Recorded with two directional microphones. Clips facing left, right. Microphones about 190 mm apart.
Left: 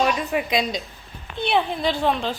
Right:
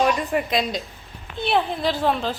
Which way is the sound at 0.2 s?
Centre (ahead or behind).